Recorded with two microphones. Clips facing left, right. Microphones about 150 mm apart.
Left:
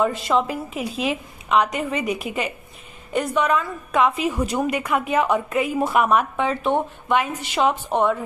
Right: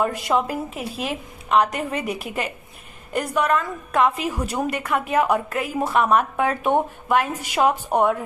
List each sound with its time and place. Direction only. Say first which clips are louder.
0.5 s a woman's voice: left 1 dB; centre (ahead or behind)
6.7 s a woman's voice: right 2 dB; 15° right (ahead or behind)
7.1 s a woman's voice: left 2 dB; 5° right (ahead or behind)